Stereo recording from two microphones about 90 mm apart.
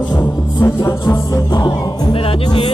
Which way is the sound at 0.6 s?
40° left (ahead or behind).